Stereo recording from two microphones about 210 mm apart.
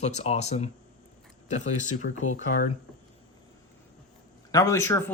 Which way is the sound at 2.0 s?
90° left.